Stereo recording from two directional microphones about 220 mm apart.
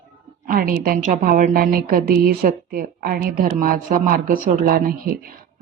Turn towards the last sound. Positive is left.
turn(degrees=-40)  # may be behind; listen again after turning